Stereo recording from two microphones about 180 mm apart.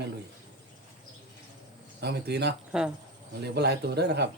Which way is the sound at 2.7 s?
5° right (ahead or behind).